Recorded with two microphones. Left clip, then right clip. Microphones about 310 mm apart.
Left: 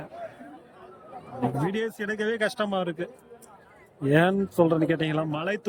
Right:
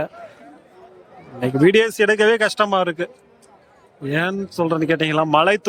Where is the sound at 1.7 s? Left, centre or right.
Centre.